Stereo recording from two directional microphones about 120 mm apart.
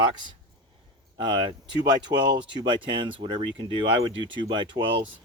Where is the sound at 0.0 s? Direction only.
40° right (ahead or behind).